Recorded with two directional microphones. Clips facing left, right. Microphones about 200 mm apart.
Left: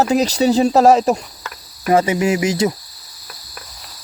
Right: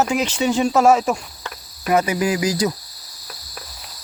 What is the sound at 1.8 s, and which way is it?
Cricket, 30° left (ahead or behind).